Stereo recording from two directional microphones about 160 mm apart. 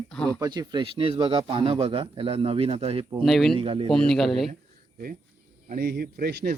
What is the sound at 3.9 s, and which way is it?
Speech, 5° left (ahead or behind).